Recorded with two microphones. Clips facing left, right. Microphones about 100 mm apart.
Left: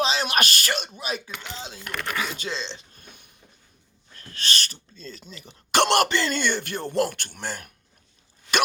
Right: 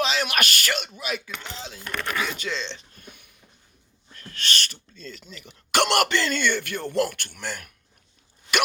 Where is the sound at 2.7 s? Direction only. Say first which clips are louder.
Right 2 dB; 20° left (ahead or behind).